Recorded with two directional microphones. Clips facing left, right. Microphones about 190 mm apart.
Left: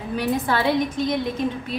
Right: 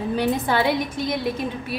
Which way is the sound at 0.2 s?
15° right (ahead or behind).